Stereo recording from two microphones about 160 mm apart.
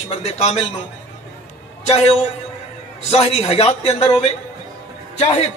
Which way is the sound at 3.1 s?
40° left (ahead or behind).